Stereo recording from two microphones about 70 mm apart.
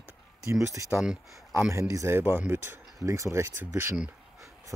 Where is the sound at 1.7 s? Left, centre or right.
Right.